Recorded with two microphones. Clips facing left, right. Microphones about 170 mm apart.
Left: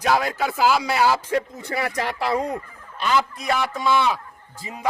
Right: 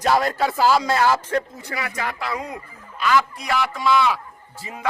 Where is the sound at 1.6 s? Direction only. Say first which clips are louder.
Left 3 dB; 30° left (ahead or behind).